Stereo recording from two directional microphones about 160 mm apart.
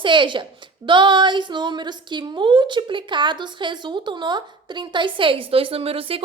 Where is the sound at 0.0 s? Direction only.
30° right (ahead or behind).